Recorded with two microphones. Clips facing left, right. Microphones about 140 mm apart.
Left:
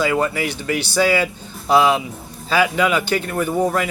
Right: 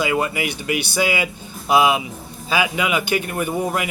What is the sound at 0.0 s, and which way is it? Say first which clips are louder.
Speech: left 2 dB; 15° right (ahead or behind).